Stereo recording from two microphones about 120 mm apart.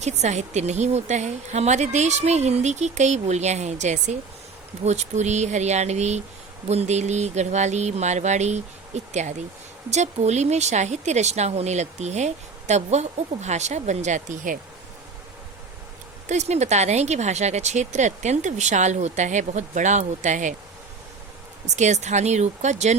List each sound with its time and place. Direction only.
0.0 s speech: 70° right (ahead or behind); by 14.5 s 90° right
16.3 s speech: 70° right (ahead or behind); by 20.6 s 90° right
21.8 s speech: 75° right (ahead or behind)